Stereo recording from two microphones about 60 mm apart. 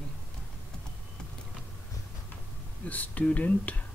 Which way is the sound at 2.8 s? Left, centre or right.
Left.